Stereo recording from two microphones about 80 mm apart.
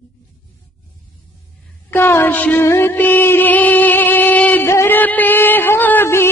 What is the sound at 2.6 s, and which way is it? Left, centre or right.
Music, left.